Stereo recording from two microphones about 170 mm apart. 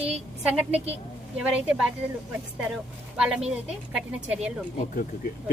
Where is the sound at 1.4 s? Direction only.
5° right (ahead or behind).